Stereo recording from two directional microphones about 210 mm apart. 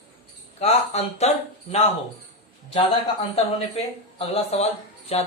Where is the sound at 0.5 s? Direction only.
30° left (ahead or behind).